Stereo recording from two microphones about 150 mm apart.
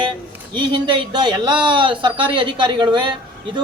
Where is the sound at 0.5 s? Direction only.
30° right (ahead or behind).